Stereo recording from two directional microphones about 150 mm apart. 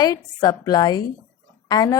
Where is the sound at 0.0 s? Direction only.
25° left (ahead or behind).